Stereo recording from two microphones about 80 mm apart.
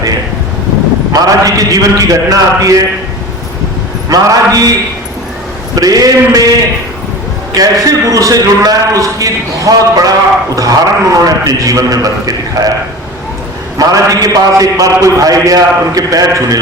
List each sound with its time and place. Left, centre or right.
1.1 s a man's voice: right
4.1 s a man's voice: right
5.7 s a man's voice: right
7.5 s a man's voice: right
13.7 s a man's voice: right